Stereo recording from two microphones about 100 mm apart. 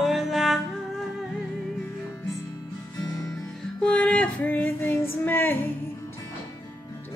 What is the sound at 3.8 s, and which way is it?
Female singing, 10° left (ahead or behind).